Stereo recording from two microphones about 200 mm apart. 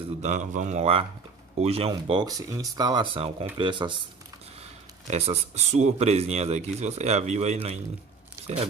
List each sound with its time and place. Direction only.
0.2 s speech: 35° right (ahead or behind)
5.1 s speech: 30° right (ahead or behind)